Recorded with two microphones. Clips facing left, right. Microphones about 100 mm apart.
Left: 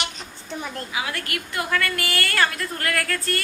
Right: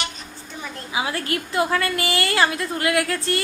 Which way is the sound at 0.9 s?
25° right (ahead or behind).